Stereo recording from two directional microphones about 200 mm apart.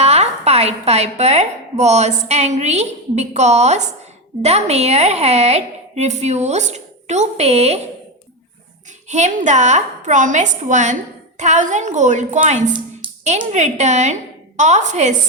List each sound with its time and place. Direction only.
0.0 s a woman's voice: 30° right (ahead or behind)
9.0 s a woman's voice: 35° right (ahead or behind)